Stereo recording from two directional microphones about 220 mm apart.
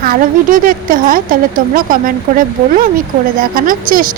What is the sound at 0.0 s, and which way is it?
Speech, 40° right (ahead or behind).